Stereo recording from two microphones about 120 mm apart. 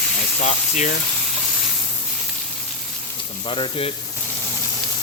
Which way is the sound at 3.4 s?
45° left (ahead or behind).